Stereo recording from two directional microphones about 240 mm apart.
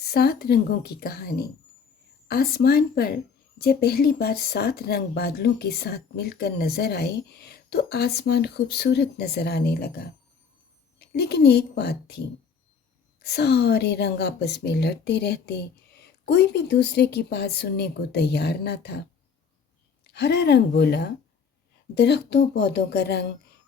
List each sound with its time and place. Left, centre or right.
0.0 s a woman's voice: left
13.2 s a woman's voice: left
20.1 s a woman's voice: left